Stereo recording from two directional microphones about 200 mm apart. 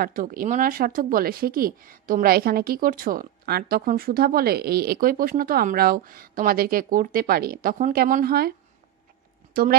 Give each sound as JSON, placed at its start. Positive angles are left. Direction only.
{"t": 0.0, "sound": "speech", "side_deg": -45}